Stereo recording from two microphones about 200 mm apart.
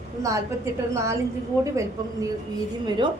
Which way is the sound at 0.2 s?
15° right (ahead or behind).